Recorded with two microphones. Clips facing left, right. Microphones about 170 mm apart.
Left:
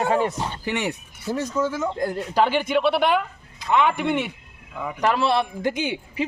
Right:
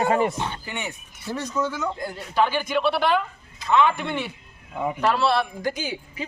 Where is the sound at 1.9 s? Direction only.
50° left (ahead or behind).